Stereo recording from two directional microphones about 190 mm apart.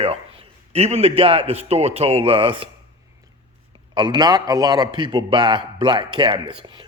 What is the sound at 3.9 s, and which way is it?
Speech, 25° right (ahead or behind).